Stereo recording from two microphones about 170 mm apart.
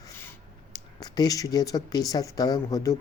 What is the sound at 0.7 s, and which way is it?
Speech, 25° left (ahead or behind).